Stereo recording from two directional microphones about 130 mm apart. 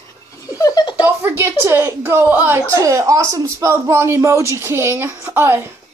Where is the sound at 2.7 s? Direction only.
25° right (ahead or behind).